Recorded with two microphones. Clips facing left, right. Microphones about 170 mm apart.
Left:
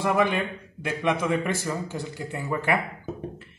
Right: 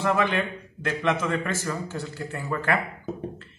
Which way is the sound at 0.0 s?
10° left (ahead or behind).